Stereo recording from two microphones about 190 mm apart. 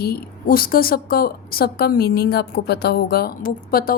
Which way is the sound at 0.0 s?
50° left (ahead or behind).